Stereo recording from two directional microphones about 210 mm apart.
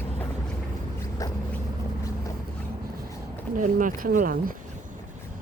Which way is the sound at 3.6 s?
40° right (ahead or behind).